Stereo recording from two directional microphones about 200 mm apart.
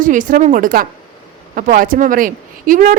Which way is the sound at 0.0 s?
40° right (ahead or behind).